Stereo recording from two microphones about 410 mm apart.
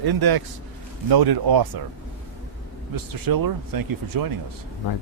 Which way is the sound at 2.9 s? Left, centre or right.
Right.